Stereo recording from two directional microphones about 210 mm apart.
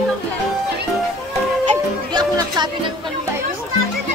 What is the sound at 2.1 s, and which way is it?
Music, 20° right (ahead or behind).